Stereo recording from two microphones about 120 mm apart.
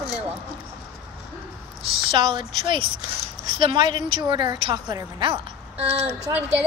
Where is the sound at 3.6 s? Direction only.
40° right (ahead or behind); by 6.3 s 55° right (ahead or behind).